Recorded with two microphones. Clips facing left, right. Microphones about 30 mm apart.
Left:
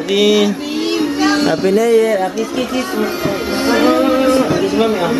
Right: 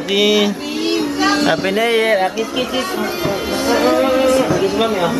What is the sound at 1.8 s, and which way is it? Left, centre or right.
Speech, right.